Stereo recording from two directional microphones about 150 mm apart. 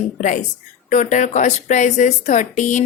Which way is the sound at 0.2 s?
55° left (ahead or behind).